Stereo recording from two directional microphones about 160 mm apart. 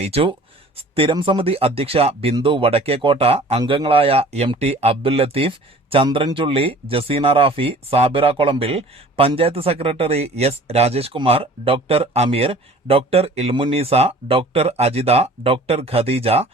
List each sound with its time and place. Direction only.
0.0 s speech: 40° right (ahead or behind)